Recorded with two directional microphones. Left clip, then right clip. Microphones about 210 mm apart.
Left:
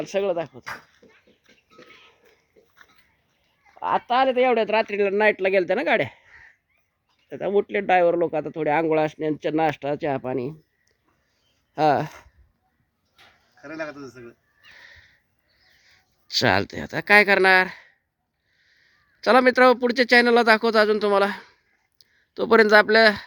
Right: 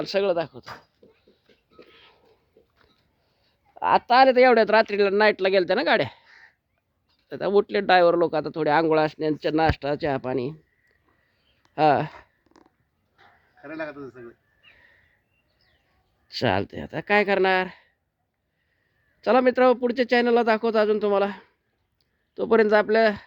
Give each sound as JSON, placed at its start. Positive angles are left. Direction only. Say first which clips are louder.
{"t": 0.1, "sound": "speech", "louder": "right 1 dB", "side_deg": -10}
{"t": 3.8, "sound": "speech", "louder": "right 4 dB", "side_deg": -20}
{"t": 4.9, "sound": "speech", "louder": "even", "side_deg": -5}
{"t": 7.3, "sound": "speech", "louder": "right 1 dB", "side_deg": -5}
{"t": 11.7, "sound": "speech", "louder": "even", "side_deg": 0}
{"t": 13.6, "sound": "speech", "louder": "left 1 dB", "side_deg": 10}
{"t": 14.8, "sound": "sniff", "louder": "left 9 dB", "side_deg": 5}
{"t": 15.9, "sound": "speech", "louder": "left 9 dB", "side_deg": 5}
{"t": 19.2, "sound": "speech", "louder": "left 3 dB", "side_deg": 5}